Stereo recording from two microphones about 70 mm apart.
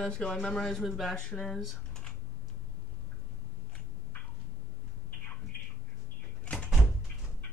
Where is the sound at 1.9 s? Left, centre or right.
Centre.